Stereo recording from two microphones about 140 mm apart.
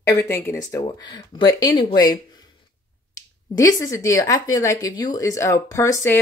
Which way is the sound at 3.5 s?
25° left (ahead or behind).